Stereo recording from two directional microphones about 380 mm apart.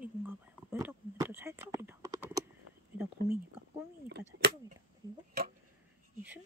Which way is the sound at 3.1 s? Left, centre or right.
Right.